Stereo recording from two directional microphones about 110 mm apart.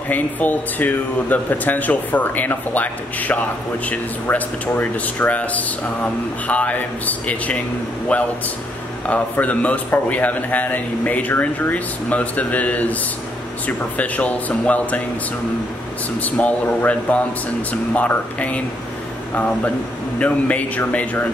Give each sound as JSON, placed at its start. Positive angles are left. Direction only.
{"t": 0.1, "sound": "a man's voice", "side_deg": 15}
{"t": 16.2, "sound": "a man's voice", "side_deg": 15}